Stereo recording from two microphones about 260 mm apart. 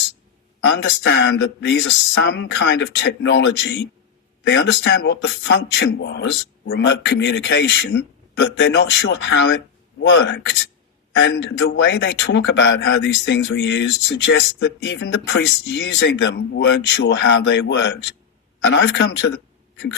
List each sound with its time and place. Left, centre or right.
0.6 s a man's voice: left